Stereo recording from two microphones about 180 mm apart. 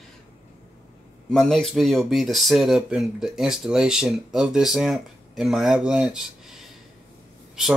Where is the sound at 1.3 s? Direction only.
Centre (ahead or behind).